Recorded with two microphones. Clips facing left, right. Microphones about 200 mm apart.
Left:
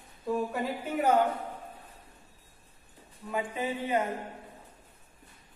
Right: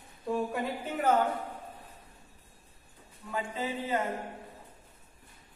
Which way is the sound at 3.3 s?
15° left (ahead or behind).